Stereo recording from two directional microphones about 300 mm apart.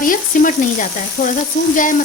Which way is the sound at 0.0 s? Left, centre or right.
Left.